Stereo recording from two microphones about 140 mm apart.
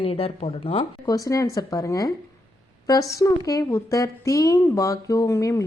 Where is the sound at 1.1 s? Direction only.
25° left (ahead or behind).